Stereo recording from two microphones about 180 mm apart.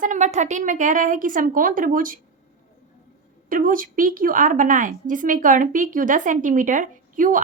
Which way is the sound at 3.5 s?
50° right (ahead or behind).